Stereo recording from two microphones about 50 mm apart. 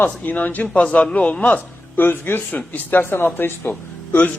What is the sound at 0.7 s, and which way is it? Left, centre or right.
Speech, left.